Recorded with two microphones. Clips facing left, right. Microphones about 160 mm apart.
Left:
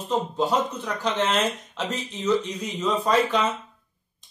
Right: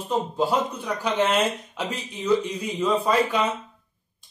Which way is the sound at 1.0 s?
10° right (ahead or behind).